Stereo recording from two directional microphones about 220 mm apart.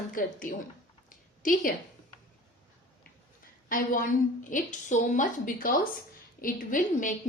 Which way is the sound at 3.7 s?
40° left (ahead or behind).